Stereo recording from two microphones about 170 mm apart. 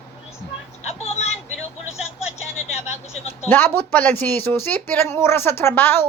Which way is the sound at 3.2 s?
15° left (ahead or behind).